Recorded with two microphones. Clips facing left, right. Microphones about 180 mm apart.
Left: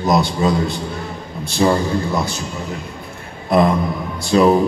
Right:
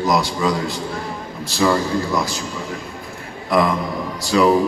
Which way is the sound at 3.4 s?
20° left (ahead or behind).